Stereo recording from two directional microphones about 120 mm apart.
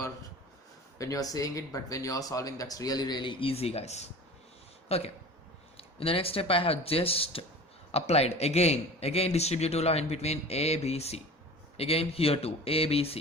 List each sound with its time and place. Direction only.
0.9 s a man's voice: 30° left (ahead or behind); by 13.1 s 55° left (ahead or behind)